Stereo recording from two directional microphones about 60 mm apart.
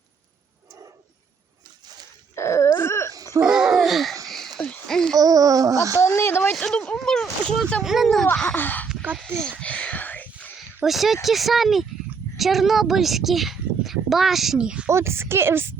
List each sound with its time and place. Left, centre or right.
2.3 s a sound: left
3.4 s babbling: centre
4.3 s a sound: centre
5.1 s a sound: right
6.0 s a sound: left
6.5 s speech: centre
7.9 s speech: centre
8.5 s speech: left
9.6 s whispering: left
10.8 s speech: centre
14.6 s speech: centre
14.8 s speech: right